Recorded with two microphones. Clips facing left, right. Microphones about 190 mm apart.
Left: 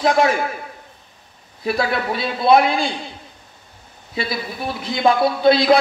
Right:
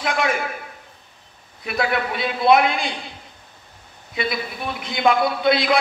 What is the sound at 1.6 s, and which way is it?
A man's voice, 30° left (ahead or behind).